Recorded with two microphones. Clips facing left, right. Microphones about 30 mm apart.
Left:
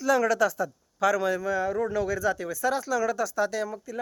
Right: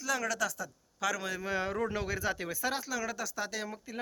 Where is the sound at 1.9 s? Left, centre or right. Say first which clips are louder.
Left 7 dB; right.